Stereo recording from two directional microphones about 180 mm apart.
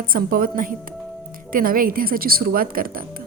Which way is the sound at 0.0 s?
50° right (ahead or behind).